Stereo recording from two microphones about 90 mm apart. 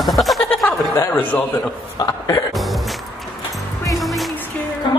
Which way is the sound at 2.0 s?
50° left (ahead or behind).